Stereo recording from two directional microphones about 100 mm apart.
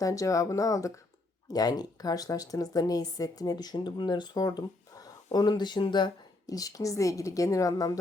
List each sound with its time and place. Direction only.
0.0 s speech: 35° left (ahead or behind)